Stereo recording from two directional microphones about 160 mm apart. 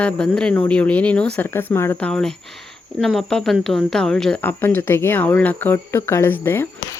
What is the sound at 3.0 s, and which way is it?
Speech, centre (ahead or behind).